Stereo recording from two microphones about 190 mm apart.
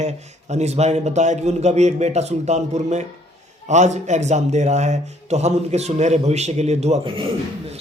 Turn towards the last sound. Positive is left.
turn(degrees=-30)  # may be behind; listen again after turning